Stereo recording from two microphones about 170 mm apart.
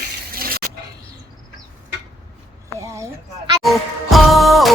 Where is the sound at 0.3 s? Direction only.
60° right (ahead or behind).